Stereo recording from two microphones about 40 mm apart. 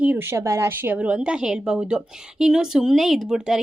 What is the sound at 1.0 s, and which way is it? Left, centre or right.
A woman's voice, right.